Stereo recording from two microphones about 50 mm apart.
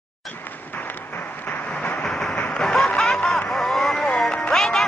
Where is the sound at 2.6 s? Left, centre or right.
Centre.